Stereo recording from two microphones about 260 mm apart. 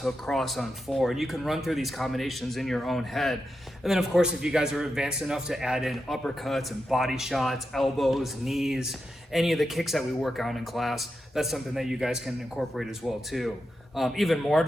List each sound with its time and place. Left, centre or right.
0.0 s a man's voice: centre